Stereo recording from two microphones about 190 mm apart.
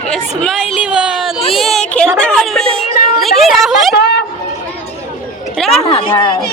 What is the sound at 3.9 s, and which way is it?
Speech, 60° left (ahead or behind).